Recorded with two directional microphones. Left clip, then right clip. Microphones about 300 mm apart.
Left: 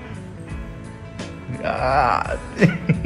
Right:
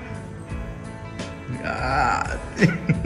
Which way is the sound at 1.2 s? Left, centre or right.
Centre.